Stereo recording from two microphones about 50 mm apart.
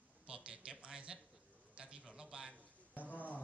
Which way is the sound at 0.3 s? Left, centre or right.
Right.